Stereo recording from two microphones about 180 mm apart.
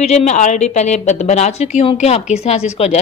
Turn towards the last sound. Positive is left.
turn(degrees=35)  # may be behind; listen again after turning